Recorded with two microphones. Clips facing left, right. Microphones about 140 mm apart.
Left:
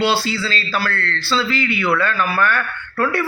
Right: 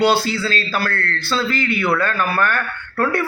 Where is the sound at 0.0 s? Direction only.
50° right (ahead or behind).